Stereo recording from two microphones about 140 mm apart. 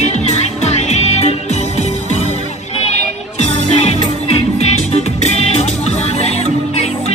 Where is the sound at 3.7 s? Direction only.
50° left (ahead or behind).